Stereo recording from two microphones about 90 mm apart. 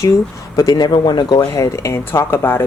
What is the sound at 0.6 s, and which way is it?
Speech, 50° left (ahead or behind).